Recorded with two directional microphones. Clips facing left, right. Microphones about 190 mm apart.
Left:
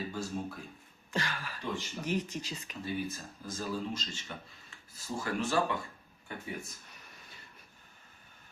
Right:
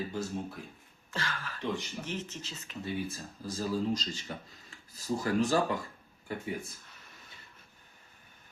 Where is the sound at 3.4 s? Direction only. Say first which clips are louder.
Right 5 dB; 35° right (ahead or behind).